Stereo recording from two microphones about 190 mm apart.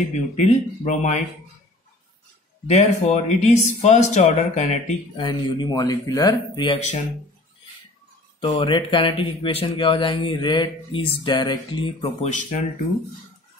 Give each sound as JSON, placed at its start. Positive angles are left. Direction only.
{"t": 0.1, "sound": "speech", "side_deg": 40}
{"t": 2.6, "sound": "speech", "side_deg": 35}
{"t": 5.2, "sound": "a man's voice", "side_deg": 20}
{"t": 8.4, "sound": "a man's voice", "side_deg": 25}
{"t": 12.3, "sound": "speech", "side_deg": 40}